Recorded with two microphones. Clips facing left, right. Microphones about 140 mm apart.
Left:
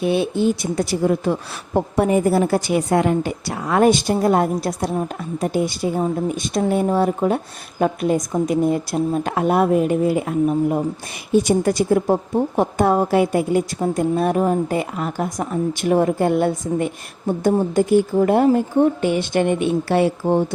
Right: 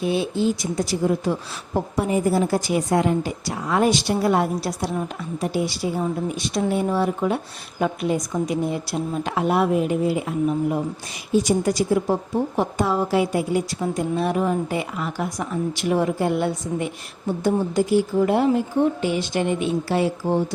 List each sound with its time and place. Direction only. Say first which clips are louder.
0.0 s a woman's voice: left 3 dB; 60° left (ahead or behind)
11.3 s a woman's voice: left 3 dB; 55° left (ahead or behind)